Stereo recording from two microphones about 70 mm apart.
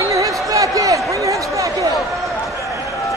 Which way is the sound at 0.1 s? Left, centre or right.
Right.